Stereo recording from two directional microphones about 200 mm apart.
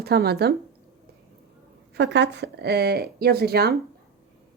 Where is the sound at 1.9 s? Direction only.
60° right (ahead or behind).